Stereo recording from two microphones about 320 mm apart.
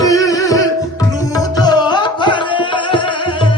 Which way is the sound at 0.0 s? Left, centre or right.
Centre.